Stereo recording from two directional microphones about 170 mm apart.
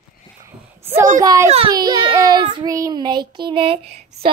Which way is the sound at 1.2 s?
20° right (ahead or behind).